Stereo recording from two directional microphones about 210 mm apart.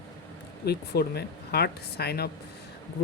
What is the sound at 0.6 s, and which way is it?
Speech, 50° left (ahead or behind).